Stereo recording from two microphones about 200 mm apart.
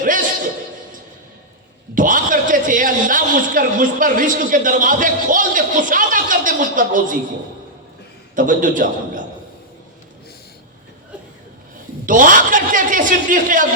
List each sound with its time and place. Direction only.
0.0 s a sound: 40° right (ahead or behind)
2.0 s a man's voice: 40° right (ahead or behind)
8.4 s a man's voice: 40° right (ahead or behind)
12.0 s a man's voice: 40° right (ahead or behind)